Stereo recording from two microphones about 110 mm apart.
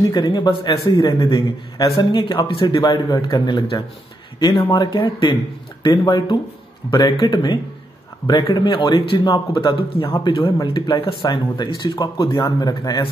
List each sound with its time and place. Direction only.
0.1 s a man's voice: 40° left (ahead or behind)